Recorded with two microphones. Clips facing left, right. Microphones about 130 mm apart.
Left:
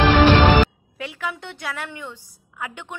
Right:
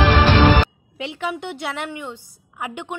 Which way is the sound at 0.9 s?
20° right (ahead or behind).